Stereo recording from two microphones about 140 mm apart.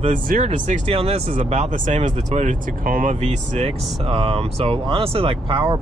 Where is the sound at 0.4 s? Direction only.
55° right (ahead or behind).